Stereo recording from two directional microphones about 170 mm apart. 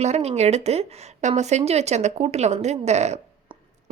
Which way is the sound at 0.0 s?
40° right (ahead or behind).